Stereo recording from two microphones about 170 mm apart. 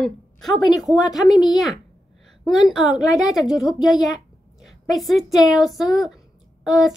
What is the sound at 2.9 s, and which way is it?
Speech, 20° left (ahead or behind).